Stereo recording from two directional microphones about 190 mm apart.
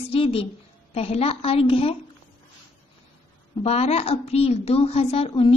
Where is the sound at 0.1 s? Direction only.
30° left (ahead or behind).